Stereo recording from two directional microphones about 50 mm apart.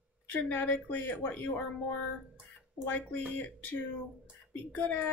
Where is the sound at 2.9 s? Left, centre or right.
Left.